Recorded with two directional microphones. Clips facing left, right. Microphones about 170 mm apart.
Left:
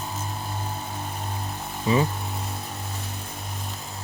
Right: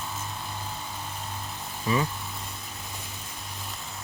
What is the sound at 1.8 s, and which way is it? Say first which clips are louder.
Speech: left 4 dB; 25° left (ahead or behind).